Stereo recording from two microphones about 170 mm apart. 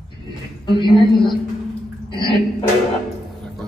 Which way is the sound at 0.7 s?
30° left (ahead or behind).